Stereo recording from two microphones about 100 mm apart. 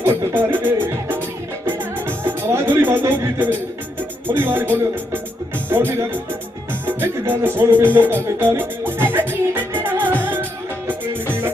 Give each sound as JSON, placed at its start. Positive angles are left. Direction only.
{"t": 0.0, "sound": "music", "side_deg": -20}
{"t": 4.3, "sound": "speech", "side_deg": -20}
{"t": 6.8, "sound": "music", "side_deg": -20}